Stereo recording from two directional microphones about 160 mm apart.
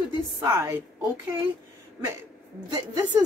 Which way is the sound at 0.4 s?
15° right (ahead or behind).